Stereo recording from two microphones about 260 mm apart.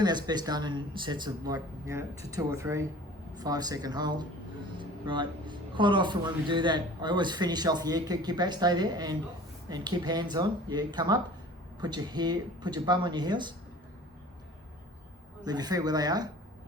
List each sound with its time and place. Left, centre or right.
0.0 s speech: centre
15.4 s speech: centre